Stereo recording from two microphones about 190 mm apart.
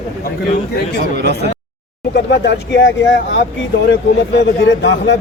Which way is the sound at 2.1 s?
65° left (ahead or behind).